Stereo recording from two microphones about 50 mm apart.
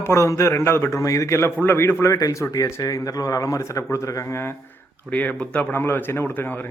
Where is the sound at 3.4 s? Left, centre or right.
Left.